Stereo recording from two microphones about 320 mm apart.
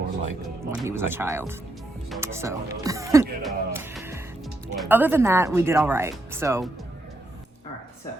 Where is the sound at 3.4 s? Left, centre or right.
Centre.